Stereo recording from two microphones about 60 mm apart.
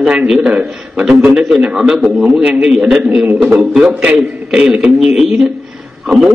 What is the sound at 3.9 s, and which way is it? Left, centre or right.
A man's voice, centre.